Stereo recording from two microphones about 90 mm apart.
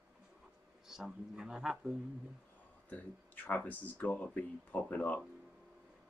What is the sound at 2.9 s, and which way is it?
Speech, 20° left (ahead or behind).